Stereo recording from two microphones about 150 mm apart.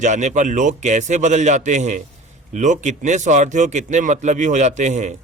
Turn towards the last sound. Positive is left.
turn(degrees=-50)  # may be behind; listen again after turning